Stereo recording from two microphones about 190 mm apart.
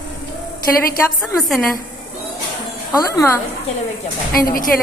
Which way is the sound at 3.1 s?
10° left (ahead or behind).